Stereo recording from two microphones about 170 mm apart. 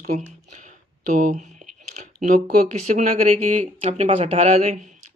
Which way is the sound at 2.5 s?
50° right (ahead or behind).